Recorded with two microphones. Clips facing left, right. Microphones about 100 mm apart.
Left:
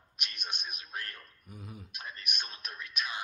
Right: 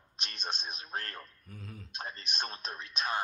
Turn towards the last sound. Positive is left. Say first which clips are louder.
# right 1 dB
turn(degrees=-30)  # may be behind; listen again after turning